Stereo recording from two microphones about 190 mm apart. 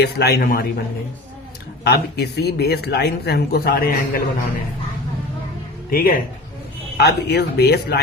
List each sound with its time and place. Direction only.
0.0 s speech: 60° left (ahead or behind)
1.8 s speech: 60° left (ahead or behind)
5.9 s speech: 50° left (ahead or behind)